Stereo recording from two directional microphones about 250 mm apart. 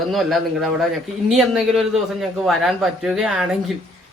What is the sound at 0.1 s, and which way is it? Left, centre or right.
Speech, centre.